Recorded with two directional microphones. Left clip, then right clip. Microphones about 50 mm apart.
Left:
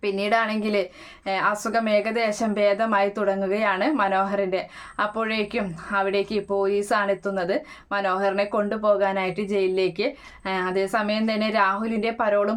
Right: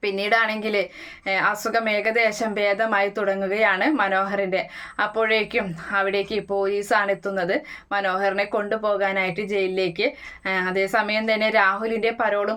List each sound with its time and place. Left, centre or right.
0.0 s a woman's voice: left